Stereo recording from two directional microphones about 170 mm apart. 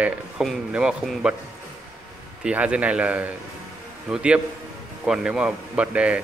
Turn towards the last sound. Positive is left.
turn(degrees=-5)  # may be behind; listen again after turning